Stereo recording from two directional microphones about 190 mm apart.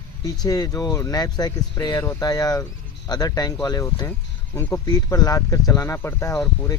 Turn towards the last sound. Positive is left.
turn(degrees=15)  # may be behind; listen again after turning